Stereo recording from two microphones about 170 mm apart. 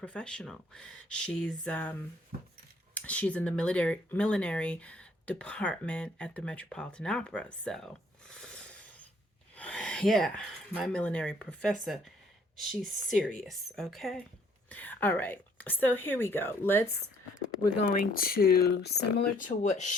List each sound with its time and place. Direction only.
0.0 s a woman's voice: 5° left (ahead or behind)
8.3 s a sound: 5° left (ahead or behind)
9.6 s a woman's voice: 5° left (ahead or behind)
17.9 s speech: 55° left (ahead or behind)
19.2 s speech: 50° left (ahead or behind)